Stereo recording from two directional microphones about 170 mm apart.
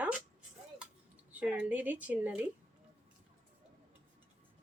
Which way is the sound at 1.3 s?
10° right (ahead or behind).